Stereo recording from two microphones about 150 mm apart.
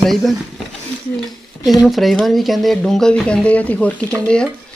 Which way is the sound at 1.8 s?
Centre (ahead or behind).